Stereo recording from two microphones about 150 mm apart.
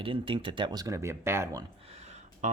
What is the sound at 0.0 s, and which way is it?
Speech, 35° right (ahead or behind).